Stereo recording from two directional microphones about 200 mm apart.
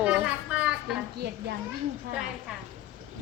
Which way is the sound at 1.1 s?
55° right (ahead or behind).